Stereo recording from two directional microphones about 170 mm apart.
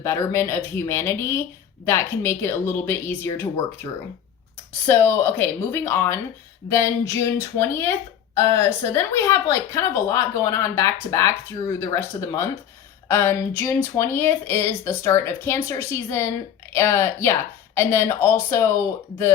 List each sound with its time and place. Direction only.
0.0 s a woman's voice: 15° left (ahead or behind)
4.9 s a woman's voice: 15° left (ahead or behind)